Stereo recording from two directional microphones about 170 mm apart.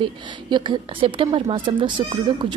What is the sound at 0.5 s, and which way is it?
A woman's voice, 25° right (ahead or behind).